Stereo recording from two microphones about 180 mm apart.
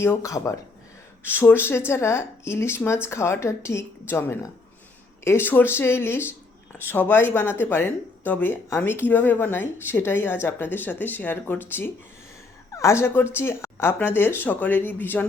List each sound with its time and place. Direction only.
0.0 s speech: 15° left (ahead or behind)